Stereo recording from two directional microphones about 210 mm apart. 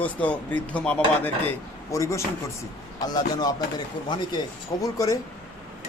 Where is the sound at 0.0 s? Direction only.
5° left (ahead or behind).